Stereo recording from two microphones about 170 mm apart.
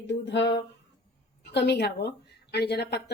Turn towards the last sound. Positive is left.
turn(degrees=80)